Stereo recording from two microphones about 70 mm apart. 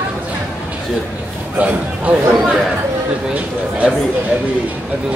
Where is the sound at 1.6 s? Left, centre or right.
Right.